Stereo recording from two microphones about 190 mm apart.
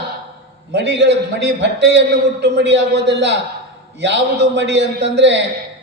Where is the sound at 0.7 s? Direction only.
65° right (ahead or behind).